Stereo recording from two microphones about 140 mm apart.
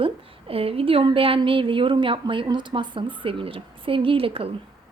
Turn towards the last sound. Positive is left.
turn(degrees=-40)  # may be behind; listen again after turning